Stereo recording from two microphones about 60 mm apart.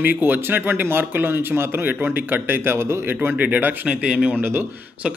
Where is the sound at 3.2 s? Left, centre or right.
Right.